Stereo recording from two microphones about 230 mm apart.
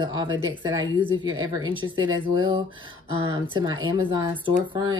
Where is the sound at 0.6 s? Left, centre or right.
Centre.